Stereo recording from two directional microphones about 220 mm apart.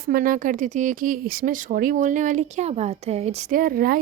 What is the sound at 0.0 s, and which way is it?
Speech, 40° right (ahead or behind).